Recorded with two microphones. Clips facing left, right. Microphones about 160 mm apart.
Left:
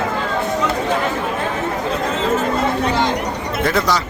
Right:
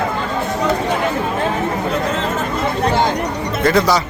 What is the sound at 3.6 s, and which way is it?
Speech, 5° left (ahead or behind).